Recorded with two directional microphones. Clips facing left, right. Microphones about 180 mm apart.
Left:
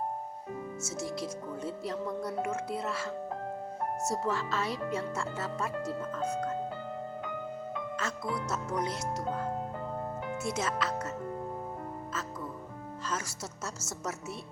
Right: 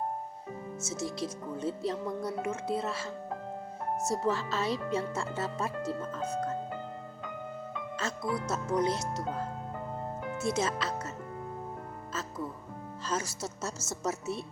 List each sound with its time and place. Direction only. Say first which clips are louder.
0.9 s speech: right 2 dB; 25° right (ahead or behind)
4.1 s speech: right 3 dB; 25° right (ahead or behind)
7.9 s speech: right 4 dB; 25° right (ahead or behind)
10.5 s speech: right 1 dB; 25° right (ahead or behind)
13.1 s speech: right 4 dB; 25° right (ahead or behind)